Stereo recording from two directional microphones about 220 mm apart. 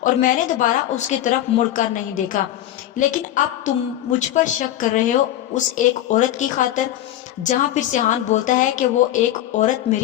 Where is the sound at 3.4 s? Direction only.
35° left (ahead or behind).